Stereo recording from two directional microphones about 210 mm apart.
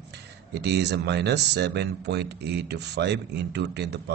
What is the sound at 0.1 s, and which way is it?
Speech, 50° right (ahead or behind).